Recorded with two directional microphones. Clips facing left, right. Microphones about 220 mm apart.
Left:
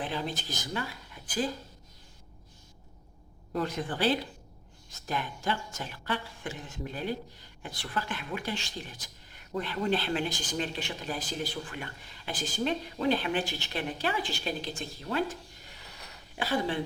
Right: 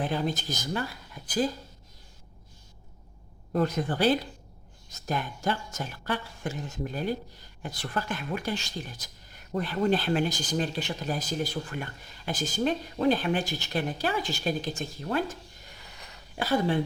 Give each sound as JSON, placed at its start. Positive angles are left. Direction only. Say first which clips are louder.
{"t": 0.0, "sound": "speech", "louder": "right 5 dB", "side_deg": -45}
{"t": 3.5, "sound": "speech", "louder": "right 5 dB", "side_deg": -45}
{"t": 16.4, "sound": "speech", "louder": "right 4 dB", "side_deg": -45}